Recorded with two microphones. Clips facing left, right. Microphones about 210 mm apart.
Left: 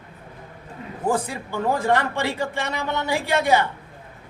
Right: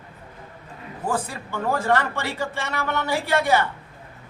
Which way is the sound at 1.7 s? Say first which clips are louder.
Even; 15° left (ahead or behind).